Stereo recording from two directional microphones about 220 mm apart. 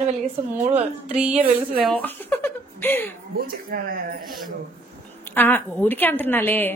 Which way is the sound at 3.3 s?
40° right (ahead or behind).